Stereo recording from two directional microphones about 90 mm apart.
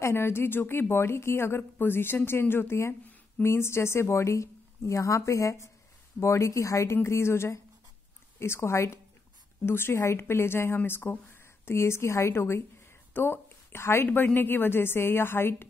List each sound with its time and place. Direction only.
0.0 s a woman's voice: 30° left (ahead or behind)